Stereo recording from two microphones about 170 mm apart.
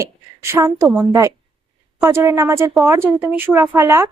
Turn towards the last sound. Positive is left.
turn(degrees=-15)  # may be behind; listen again after turning